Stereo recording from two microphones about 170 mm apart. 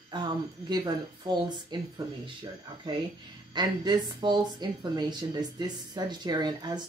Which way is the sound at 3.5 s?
25° right (ahead or behind).